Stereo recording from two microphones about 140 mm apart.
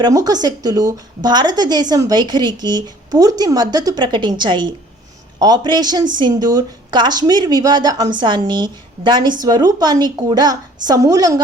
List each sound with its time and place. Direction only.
0.0 s a woman's voice: 25° right (ahead or behind)